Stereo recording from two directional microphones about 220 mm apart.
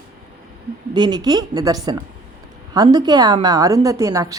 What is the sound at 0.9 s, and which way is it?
A woman's voice, 20° right (ahead or behind).